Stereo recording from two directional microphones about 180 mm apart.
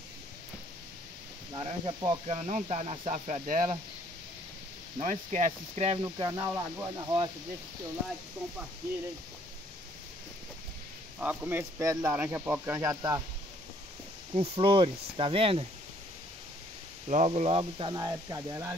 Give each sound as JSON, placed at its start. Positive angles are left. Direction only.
{"t": 1.5, "sound": "speech", "side_deg": -25}
{"t": 5.0, "sound": "speech", "side_deg": -45}
{"t": 6.0, "sound": "speech", "side_deg": -25}
{"t": 11.1, "sound": "speech", "side_deg": -10}
{"t": 14.3, "sound": "speech", "side_deg": -30}
{"t": 17.1, "sound": "speech", "side_deg": -40}